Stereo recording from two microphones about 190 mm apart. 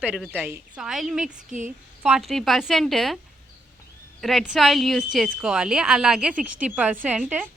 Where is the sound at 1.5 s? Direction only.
40° right (ahead or behind).